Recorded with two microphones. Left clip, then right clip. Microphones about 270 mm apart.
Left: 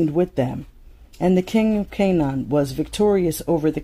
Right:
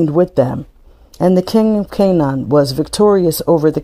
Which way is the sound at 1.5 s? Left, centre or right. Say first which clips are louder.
Right 7 dB; right.